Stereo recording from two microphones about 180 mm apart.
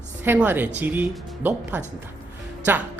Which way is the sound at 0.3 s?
10° right (ahead or behind).